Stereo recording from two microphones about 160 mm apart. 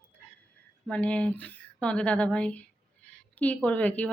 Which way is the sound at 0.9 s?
10° left (ahead or behind).